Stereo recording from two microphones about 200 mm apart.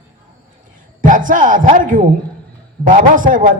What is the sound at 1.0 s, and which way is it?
A man's voice, 40° right (ahead or behind).